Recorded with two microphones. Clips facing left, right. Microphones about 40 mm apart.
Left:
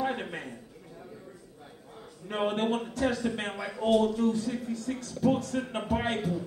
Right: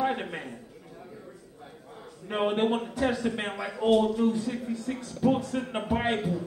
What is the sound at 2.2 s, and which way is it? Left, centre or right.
Speech, centre.